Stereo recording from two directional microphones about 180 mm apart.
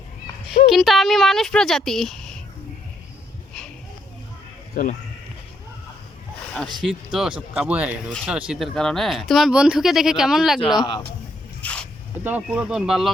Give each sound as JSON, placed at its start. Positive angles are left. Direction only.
{"t": 0.7, "sound": "speech", "side_deg": 0}
{"t": 4.7, "sound": "speech", "side_deg": 50}
{"t": 6.5, "sound": "speech", "side_deg": 0}
{"t": 11.6, "sound": "snake", "side_deg": 5}
{"t": 12.2, "sound": "speech", "side_deg": -10}